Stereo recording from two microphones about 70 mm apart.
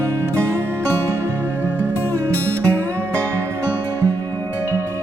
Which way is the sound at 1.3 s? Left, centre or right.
Right.